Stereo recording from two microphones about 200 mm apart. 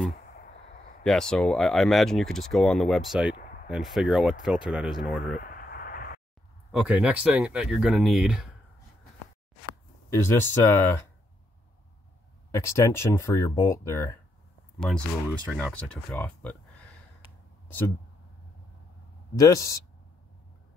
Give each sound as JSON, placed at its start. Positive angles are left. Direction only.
{"t": 1.0, "sound": "speech", "side_deg": 5}
{"t": 5.2, "sound": "a sound", "side_deg": 45}
{"t": 6.7, "sound": "speech", "side_deg": -5}
{"t": 10.0, "sound": "speech", "side_deg": 10}
{"t": 12.4, "sound": "speech", "side_deg": 15}
{"t": 15.5, "sound": "speech", "side_deg": 0}
{"t": 17.6, "sound": "speech", "side_deg": 10}
{"t": 19.3, "sound": "speech", "side_deg": 15}